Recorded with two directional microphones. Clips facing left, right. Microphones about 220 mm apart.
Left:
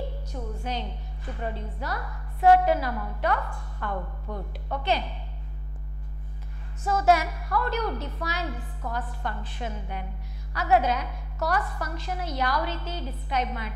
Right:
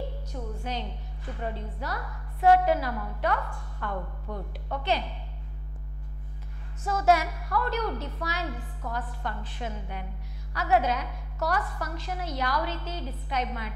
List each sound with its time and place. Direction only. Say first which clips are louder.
0.3 s a woman's voice: left 2 dB; 15° left (ahead or behind)
6.8 s a woman's voice: left 1 dB; 10° left (ahead or behind)